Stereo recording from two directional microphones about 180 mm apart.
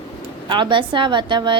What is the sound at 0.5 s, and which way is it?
A woman's voice, 25° right (ahead or behind).